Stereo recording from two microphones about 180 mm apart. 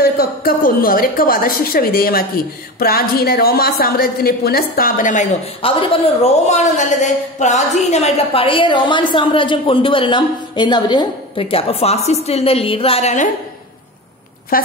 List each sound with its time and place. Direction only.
0.0 s a woman's voice: 55° left (ahead or behind); by 13.3 s 40° left (ahead or behind)
14.5 s a woman's voice: 55° left (ahead or behind)